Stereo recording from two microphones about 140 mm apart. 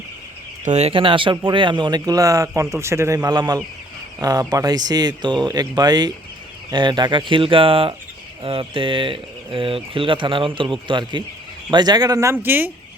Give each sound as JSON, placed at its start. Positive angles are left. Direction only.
{"t": 0.6, "sound": "speech", "side_deg": -55}